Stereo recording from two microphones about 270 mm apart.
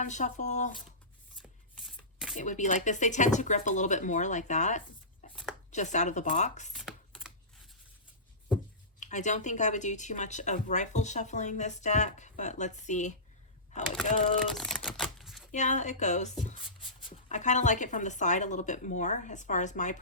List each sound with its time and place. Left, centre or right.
0.0 s speech: left
1.4 s shuffling cards: centre
2.3 s speech: left
6.7 s computer keyboard: centre
9.0 s speech: left
14.5 s typewriter: centre
15.5 s speech: left